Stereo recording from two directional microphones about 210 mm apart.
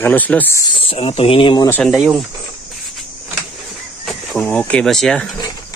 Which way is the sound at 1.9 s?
Centre (ahead or behind).